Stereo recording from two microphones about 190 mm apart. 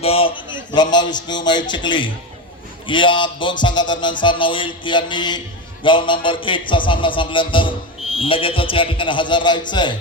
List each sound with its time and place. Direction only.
0.0 s a man's voice: 30° left (ahead or behind)